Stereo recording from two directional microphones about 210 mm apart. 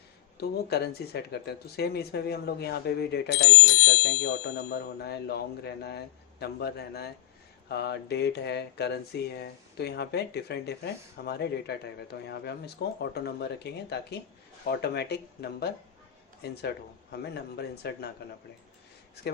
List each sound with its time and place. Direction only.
0.3 s speech: 50° left (ahead or behind)